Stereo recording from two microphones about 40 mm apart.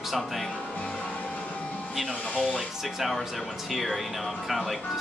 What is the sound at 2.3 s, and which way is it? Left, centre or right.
Speech, left.